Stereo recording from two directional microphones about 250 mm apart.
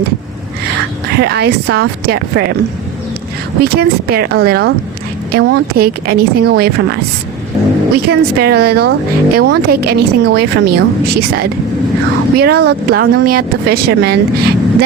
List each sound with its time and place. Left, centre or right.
1.1 s speech: right
3.6 s speech: right
7.9 s speech: right